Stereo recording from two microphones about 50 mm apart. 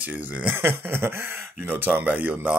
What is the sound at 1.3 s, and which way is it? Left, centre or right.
Speech, right.